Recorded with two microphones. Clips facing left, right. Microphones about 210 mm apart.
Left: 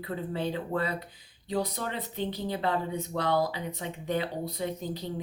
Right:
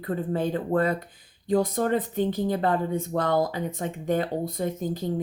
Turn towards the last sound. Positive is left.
turn(degrees=-50)  # may be behind; listen again after turning